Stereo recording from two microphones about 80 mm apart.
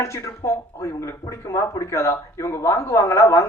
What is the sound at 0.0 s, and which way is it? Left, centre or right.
Speech, left.